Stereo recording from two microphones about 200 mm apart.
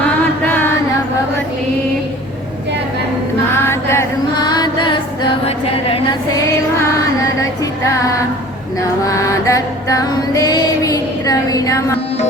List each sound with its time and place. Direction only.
3.5 s chant: 10° left (ahead or behind)
8.8 s music: 15° left (ahead or behind)